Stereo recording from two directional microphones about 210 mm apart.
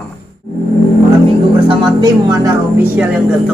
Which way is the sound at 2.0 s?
15° right (ahead or behind).